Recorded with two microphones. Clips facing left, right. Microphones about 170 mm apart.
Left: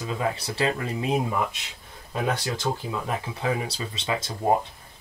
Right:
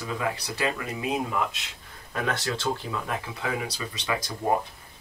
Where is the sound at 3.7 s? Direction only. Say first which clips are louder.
Left 1 dB; 25° left (ahead or behind).